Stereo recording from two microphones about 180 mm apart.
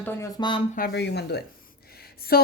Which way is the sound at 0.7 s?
60° left (ahead or behind).